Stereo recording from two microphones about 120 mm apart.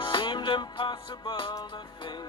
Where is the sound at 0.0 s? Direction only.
40° left (ahead or behind).